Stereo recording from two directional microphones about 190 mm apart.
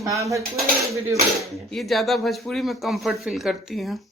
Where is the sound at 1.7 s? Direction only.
Centre (ahead or behind).